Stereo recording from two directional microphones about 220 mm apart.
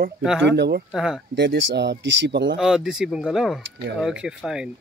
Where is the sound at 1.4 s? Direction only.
55° right (ahead or behind).